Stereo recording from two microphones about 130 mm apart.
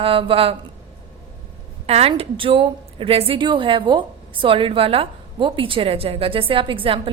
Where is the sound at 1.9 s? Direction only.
50° right (ahead or behind).